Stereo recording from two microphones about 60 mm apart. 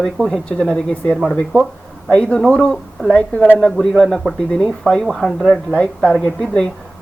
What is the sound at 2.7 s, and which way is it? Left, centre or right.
A woman's voice, centre.